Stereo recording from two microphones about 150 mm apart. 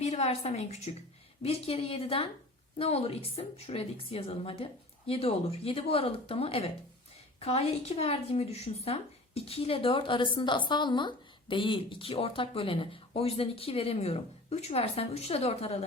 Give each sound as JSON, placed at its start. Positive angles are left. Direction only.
{"t": 0.0, "sound": "a woman's voice", "side_deg": 45}